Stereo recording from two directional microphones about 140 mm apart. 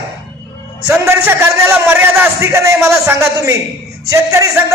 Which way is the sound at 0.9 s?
20° right (ahead or behind).